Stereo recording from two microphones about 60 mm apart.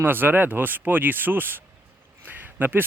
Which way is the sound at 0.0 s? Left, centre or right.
Right.